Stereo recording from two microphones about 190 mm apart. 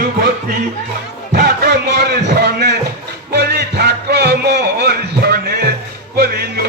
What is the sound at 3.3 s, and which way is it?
Music, 60° right (ahead or behind).